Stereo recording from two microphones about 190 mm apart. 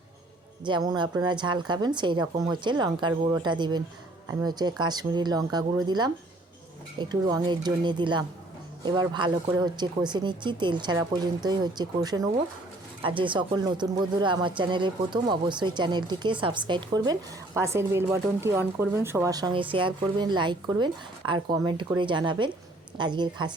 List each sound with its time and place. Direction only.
0.6 s speech: 25° right (ahead or behind)